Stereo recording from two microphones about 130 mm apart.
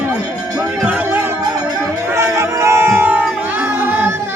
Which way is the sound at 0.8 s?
10° right (ahead or behind).